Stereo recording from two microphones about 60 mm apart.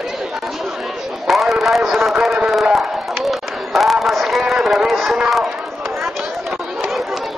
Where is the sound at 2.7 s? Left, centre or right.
Centre.